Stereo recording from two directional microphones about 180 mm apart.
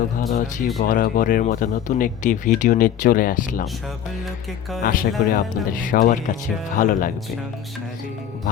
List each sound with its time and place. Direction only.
0.2 s speech: 45° left (ahead or behind)
4.8 s speech: 50° left (ahead or behind)